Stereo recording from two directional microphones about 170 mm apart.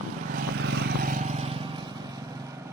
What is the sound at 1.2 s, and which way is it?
Vehicle, 40° right (ahead or behind).